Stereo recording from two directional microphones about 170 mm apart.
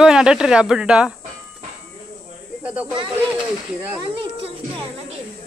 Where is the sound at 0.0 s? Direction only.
5° right (ahead or behind).